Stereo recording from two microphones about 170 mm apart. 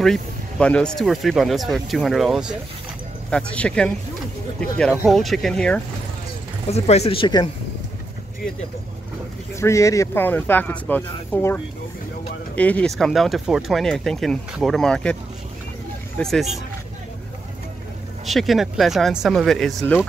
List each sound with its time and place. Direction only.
0.0 s speech: 5° left (ahead or behind)
6.7 s speech: 40° left (ahead or behind)
9.6 s speech: 15° left (ahead or behind)
12.5 s speech: 10° left (ahead or behind)
16.2 s speech: centre (ahead or behind)
18.2 s speech: centre (ahead or behind)